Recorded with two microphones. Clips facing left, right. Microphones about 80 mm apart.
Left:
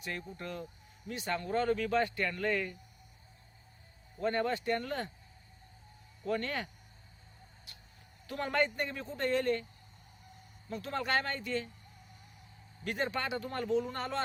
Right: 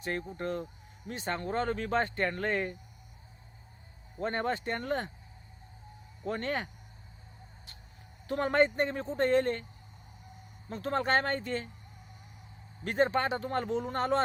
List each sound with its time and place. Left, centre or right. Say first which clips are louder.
0.0 s speech: right 6 dB; right
4.2 s speech: even; right
6.2 s speech: right 1 dB; right
8.3 s speech: right 6 dB; right
10.7 s speech: right 5 dB; right
12.8 s speech: right 7 dB; right